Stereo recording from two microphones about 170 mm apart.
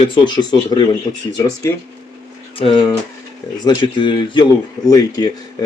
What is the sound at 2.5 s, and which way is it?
Speech, 30° left (ahead or behind).